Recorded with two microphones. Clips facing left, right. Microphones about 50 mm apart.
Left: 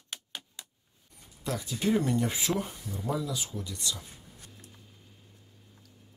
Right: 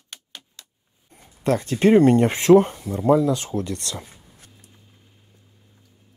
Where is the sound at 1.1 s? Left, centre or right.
Right.